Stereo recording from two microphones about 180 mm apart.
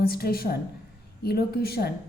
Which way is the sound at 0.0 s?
55° left (ahead or behind).